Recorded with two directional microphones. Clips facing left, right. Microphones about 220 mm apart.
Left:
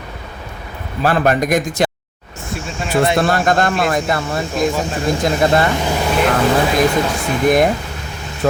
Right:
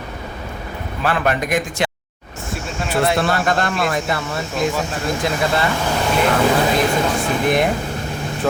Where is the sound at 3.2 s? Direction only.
40° left (ahead or behind).